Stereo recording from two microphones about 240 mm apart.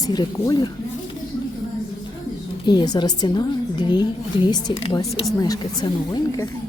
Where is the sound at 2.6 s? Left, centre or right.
Centre.